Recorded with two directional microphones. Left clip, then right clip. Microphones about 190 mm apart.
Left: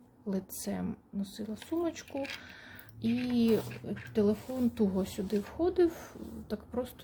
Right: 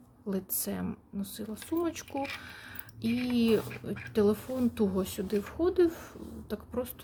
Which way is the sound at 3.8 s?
15° right (ahead or behind).